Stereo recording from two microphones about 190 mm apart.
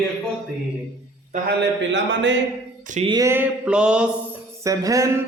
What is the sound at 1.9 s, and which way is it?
Speech, 70° right (ahead or behind).